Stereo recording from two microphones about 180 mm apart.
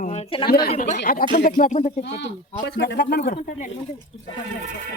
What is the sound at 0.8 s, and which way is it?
Speech, 45° left (ahead or behind).